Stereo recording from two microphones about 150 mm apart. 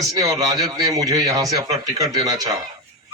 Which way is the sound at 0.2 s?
25° right (ahead or behind).